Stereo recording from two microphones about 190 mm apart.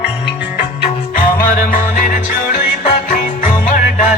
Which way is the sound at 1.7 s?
45° left (ahead or behind).